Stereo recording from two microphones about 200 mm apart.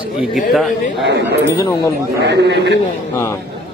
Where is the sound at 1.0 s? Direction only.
60° right (ahead or behind).